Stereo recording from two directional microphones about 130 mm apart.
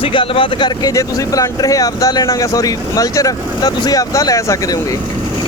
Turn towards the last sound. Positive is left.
turn(degrees=25)  # may be behind; listen again after turning